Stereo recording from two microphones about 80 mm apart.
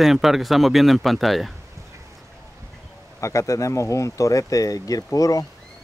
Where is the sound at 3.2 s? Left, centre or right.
Left.